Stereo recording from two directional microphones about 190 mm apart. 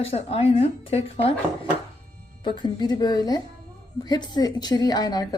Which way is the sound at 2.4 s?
25° left (ahead or behind).